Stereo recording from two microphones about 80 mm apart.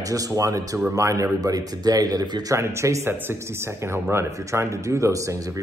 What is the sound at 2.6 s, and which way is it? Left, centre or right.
Speech, right.